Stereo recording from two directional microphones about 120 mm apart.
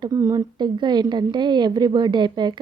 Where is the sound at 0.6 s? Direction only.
40° right (ahead or behind).